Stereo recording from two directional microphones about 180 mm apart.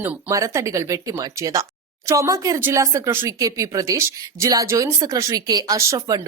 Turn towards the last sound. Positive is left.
turn(degrees=-20)  # may be behind; listen again after turning